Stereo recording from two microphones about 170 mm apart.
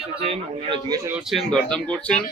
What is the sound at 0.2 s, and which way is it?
Speech, 35° right (ahead or behind).